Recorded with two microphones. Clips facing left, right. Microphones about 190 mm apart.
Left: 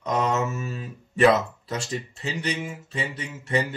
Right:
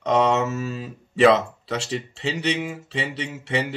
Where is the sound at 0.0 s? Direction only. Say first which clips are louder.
Right 5 dB; 75° right (ahead or behind).